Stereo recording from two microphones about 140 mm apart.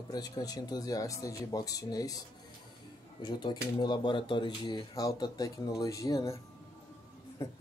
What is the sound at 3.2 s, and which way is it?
Speech, 30° left (ahead or behind).